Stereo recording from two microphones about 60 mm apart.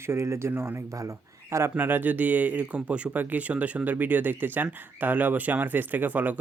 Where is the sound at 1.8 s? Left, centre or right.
Right.